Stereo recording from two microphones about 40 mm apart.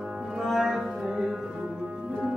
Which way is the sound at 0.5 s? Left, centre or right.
Centre.